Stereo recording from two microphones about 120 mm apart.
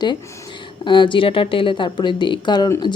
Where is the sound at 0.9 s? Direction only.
40° left (ahead or behind).